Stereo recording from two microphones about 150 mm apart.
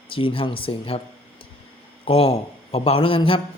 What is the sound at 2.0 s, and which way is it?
A man's voice, 35° left (ahead or behind).